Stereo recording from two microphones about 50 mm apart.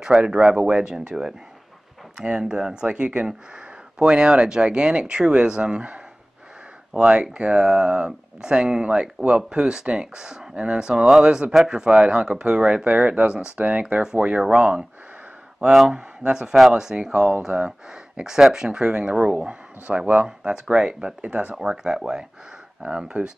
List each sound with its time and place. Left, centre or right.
0.3 s speech: centre
15.9 s speech: centre
21.2 s speech: right
21.5 s speech: centre